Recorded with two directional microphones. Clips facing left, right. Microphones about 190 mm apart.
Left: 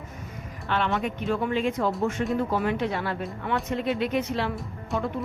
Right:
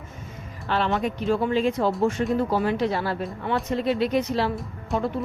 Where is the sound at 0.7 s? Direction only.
35° right (ahead or behind).